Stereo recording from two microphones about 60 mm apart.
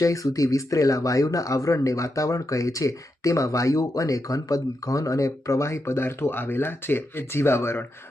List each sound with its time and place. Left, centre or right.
0.0 s speech: left